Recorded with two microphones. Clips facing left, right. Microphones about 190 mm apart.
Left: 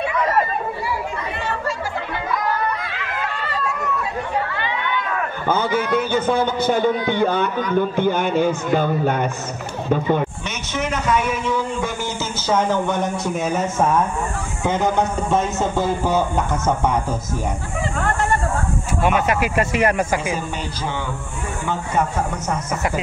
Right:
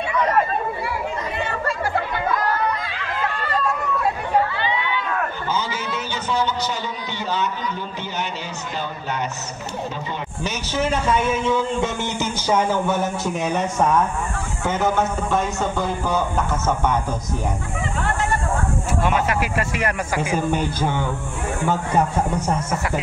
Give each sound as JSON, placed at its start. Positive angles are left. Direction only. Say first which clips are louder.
{"t": 5.5, "sound": "a man's voice", "louder": "left 12 dB", "side_deg": 55}
{"t": 10.8, "sound": "a man's voice", "louder": "even", "side_deg": -30}
{"t": 12.4, "sound": "a man's voice", "louder": "left 1 dB", "side_deg": -10}
{"t": 19.0, "sound": "speech", "louder": "left 4 dB", "side_deg": 20}
{"t": 20.3, "sound": "speech", "louder": "right 6 dB", "side_deg": -50}